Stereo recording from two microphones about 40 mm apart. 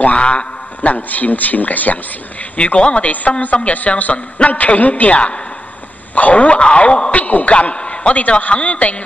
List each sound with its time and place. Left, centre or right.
0.0 s a man's voice: left
2.5 s a man's voice: left
7.5 s a man's voice: left